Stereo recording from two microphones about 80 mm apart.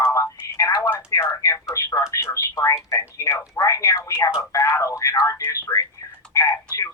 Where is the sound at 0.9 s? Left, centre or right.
Left.